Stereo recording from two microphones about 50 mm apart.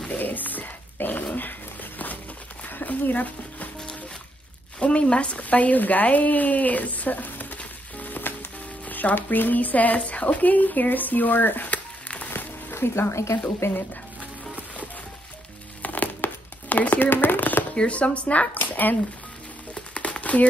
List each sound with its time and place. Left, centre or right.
0.2 s dog: left
1.2 s a sound: left
4.7 s speech: left
7.5 s sizzle: left
12.3 s music: left
13.6 s speech: left
15.8 s crumpling: left
17.7 s speech: left
19.7 s crumpling: left